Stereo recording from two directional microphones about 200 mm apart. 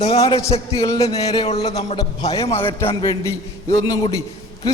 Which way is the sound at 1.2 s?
30° left (ahead or behind).